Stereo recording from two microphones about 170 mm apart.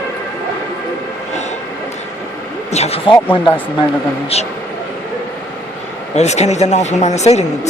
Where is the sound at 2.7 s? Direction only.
40° left (ahead or behind).